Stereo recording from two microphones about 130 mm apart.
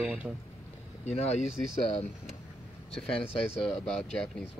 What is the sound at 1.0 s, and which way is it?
Speech, 55° left (ahead or behind).